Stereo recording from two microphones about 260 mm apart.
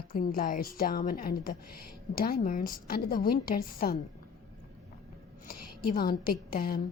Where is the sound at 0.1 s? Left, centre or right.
Left.